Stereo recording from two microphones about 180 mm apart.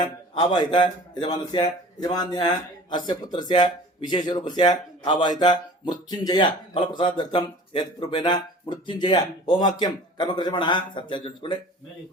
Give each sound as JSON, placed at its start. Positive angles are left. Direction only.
{"t": 0.3, "sound": "a man's voice", "side_deg": 25}